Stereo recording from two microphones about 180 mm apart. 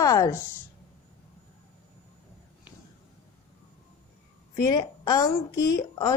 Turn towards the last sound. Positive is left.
turn(degrees=20)  # may be behind; listen again after turning